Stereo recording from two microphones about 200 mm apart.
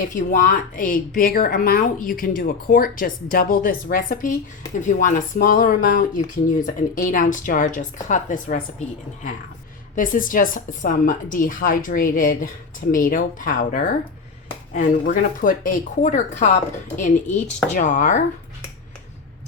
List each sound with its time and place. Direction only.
0.0 s speech: 40° left (ahead or behind)
9.9 s speech: 40° left (ahead or behind)